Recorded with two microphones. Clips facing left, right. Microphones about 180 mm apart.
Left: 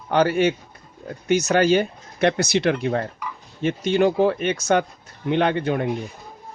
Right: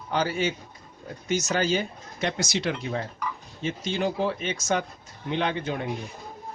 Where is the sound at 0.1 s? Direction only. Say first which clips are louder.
Left 8 dB; 60° left (ahead or behind).